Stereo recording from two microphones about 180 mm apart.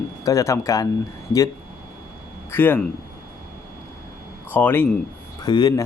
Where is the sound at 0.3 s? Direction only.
15° left (ahead or behind).